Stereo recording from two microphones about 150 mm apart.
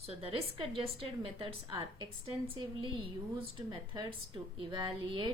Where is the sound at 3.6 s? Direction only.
30° right (ahead or behind).